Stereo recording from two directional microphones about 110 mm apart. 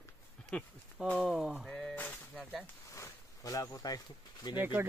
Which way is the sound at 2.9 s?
30° left (ahead or behind).